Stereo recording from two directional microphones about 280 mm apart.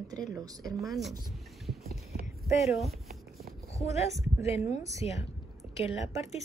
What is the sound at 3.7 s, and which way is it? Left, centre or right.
A woman's voice, left.